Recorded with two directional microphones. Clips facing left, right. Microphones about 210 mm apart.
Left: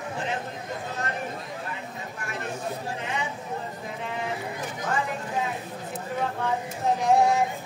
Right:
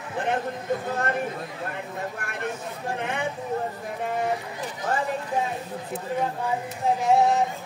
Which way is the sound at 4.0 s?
45° right (ahead or behind).